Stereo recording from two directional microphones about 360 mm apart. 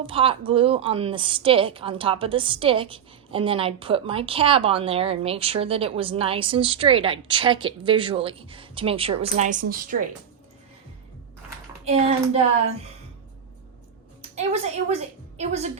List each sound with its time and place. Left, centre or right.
0.0 s a woman's voice: centre
11.9 s a woman's voice: centre
14.2 s a woman's voice: centre